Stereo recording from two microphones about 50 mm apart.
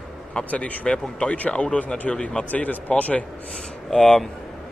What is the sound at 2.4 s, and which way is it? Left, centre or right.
Speech, left.